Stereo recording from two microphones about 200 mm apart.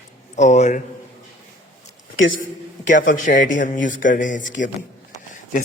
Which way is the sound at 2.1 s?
75° left (ahead or behind).